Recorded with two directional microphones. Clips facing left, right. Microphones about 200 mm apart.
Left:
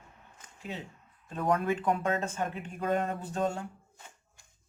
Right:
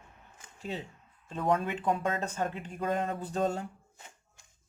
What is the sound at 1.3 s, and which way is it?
Speech, 25° right (ahead or behind).